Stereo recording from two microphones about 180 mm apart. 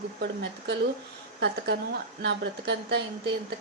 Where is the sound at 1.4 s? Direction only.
75° right (ahead or behind).